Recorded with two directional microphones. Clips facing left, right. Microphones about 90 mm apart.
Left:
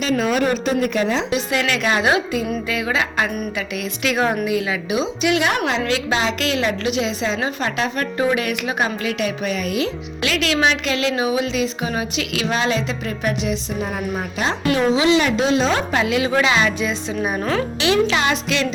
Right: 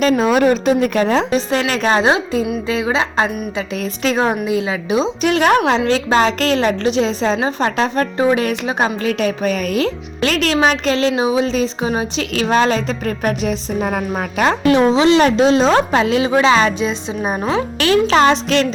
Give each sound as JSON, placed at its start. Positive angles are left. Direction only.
{"t": 0.2, "sound": "a woman's voice", "side_deg": -40}
{"t": 1.3, "sound": "a woman's voice", "side_deg": -35}
{"t": 2.6, "sound": "a sound", "side_deg": -25}
{"t": 4.4, "sound": "a woman's voice", "side_deg": -25}
{"t": 14.8, "sound": "a woman's voice", "side_deg": -35}
{"t": 17.7, "sound": "a woman's voice", "side_deg": -45}